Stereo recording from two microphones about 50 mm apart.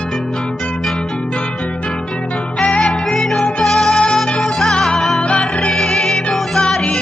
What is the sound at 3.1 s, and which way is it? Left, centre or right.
Music, centre.